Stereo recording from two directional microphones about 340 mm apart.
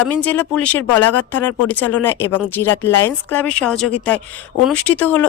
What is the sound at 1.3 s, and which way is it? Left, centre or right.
Speech, centre.